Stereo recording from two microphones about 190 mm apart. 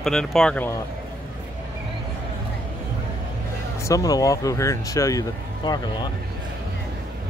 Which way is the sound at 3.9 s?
20° left (ahead or behind).